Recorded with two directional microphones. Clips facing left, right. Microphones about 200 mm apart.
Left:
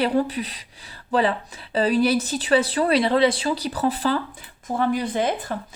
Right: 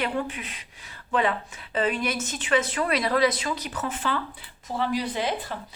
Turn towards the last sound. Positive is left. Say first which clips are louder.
# left 4 dB
turn(degrees=50)  # may be behind; listen again after turning